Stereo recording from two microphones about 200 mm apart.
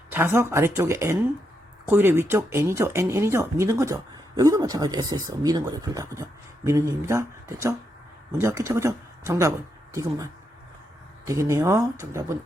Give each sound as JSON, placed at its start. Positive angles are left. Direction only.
{"t": 0.1, "sound": "speech", "side_deg": -10}
{"t": 11.3, "sound": "speech", "side_deg": -15}